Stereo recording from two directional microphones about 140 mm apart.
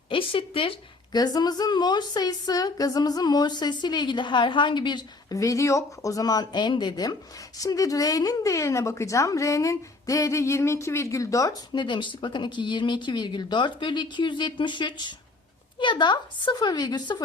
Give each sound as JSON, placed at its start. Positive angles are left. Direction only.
{"t": 0.1, "sound": "speech", "side_deg": 40}
{"t": 1.1, "sound": "a woman's voice", "side_deg": 30}